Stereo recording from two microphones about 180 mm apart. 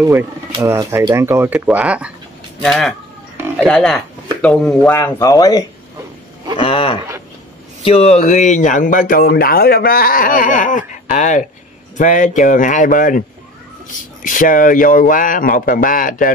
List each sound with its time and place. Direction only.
0.5 s speech: 20° right (ahead or behind); by 4.9 s 5° left (ahead or behind)
4.9 s speech: 15° left (ahead or behind)
6.5 s cattle: 30° left (ahead or behind)
7.8 s speech: 35° left (ahead or behind)
14.2 s speech: 50° left (ahead or behind)